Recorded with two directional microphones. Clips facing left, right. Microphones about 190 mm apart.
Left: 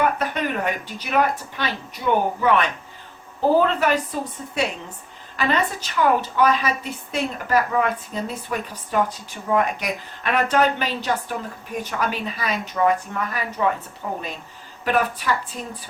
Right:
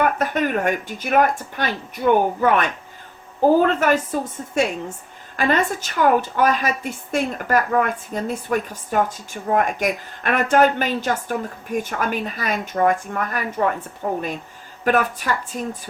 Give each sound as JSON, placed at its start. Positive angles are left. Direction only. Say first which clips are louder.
{"t": 0.0, "sound": "a woman's voice", "louder": "right 2 dB", "side_deg": -50}